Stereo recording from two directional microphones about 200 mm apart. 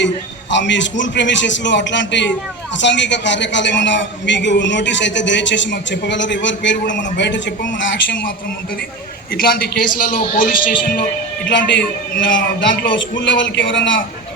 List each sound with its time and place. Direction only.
0.5 s a man's voice: 65° left (ahead or behind)
9.3 s a man's voice: 50° left (ahead or behind)
11.4 s a man's voice: 65° left (ahead or behind)